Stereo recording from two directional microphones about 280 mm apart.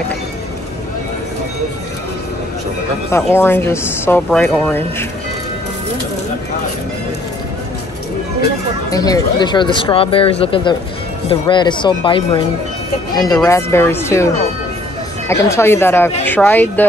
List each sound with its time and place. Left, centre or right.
3.1 s speech: centre
8.9 s speech: centre